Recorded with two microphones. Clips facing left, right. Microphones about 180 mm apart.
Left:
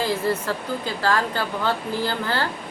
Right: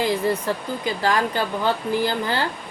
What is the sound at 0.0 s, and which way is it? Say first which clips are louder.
A woman's voice: right 2 dB; 15° right (ahead or behind).